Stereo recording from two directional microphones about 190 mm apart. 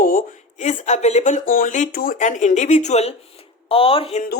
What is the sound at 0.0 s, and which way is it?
Speech, 45° left (ahead or behind).